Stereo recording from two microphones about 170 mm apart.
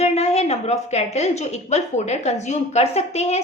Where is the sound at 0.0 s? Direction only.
40° left (ahead or behind).